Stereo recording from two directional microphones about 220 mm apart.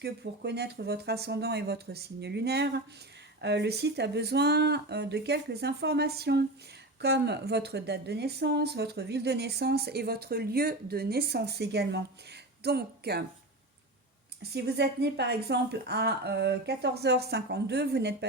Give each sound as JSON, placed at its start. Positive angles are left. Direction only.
{"t": 0.0, "sound": "a woman's voice", "side_deg": -50}
{"t": 14.5, "sound": "a woman's voice", "side_deg": -50}